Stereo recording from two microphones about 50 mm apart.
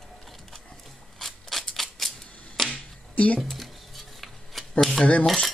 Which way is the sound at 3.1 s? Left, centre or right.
Left.